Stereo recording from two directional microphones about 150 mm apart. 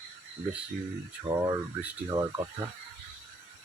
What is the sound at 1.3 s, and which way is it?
Speech, 25° right (ahead or behind).